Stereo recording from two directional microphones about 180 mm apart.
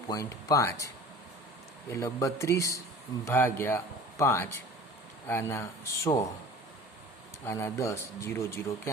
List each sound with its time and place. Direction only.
0.1 s speech: 20° left (ahead or behind)
1.9 s speech: 15° left (ahead or behind)
7.4 s speech: 15° left (ahead or behind)